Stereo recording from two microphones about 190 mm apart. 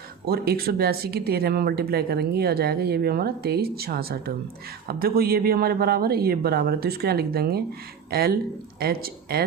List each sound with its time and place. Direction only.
0.3 s speech: 55° right (ahead or behind)